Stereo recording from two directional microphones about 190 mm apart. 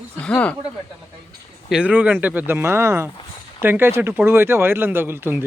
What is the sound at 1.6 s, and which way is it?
Speech, 5° right (ahead or behind).